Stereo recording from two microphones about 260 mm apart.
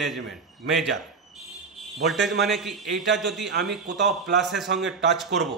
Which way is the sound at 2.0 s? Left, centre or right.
Centre.